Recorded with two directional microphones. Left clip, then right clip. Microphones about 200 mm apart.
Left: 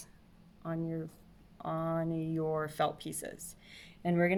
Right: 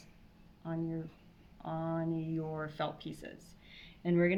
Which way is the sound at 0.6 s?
55° left (ahead or behind).